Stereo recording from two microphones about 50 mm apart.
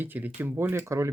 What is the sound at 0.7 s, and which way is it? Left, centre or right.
Speech, right.